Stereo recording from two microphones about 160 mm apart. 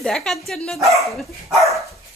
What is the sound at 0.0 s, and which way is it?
Speech, centre (ahead or behind).